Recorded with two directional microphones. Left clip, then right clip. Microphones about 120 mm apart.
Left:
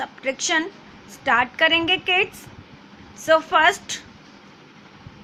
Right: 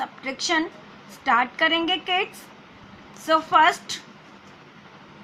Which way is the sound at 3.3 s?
25° left (ahead or behind).